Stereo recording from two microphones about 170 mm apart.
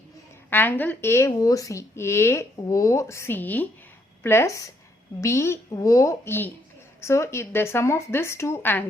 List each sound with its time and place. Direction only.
0.5 s a woman's voice: 10° left (ahead or behind)